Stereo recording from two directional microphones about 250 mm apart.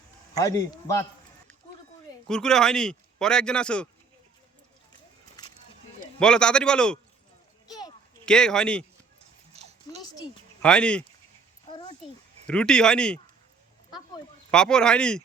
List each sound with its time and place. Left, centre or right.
0.3 s a man's voice: centre
2.2 s speech: centre
6.1 s speech: centre
7.7 s a sound: centre
8.2 s speech: centre
9.5 s a sound: right
10.6 s speech: centre
11.7 s a sound: centre
12.5 s speech: centre
14.5 s speech: centre